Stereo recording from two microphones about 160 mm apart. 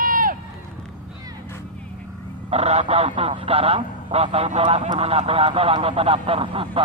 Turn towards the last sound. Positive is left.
turn(degrees=-35)  # may be behind; listen again after turning